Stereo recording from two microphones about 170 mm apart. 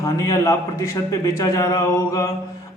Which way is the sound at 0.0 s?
20° left (ahead or behind).